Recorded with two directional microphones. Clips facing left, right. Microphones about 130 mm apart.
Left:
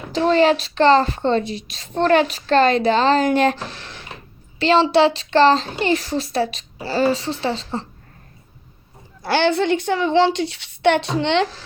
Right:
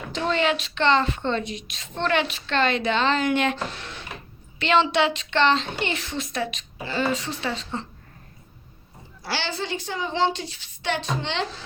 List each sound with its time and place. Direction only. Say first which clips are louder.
0.1 s a woman's voice: left 8 dB; 35° left (ahead or behind)
4.6 s a woman's voice: left 6 dB; 35° left (ahead or behind)
9.2 s a woman's voice: left 12 dB; 55° left (ahead or behind)